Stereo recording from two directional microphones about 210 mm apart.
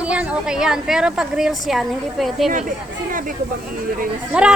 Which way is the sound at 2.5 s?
40° right (ahead or behind).